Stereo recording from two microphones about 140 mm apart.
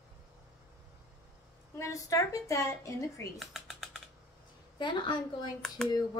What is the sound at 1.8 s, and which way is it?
A woman's voice, 20° left (ahead or behind).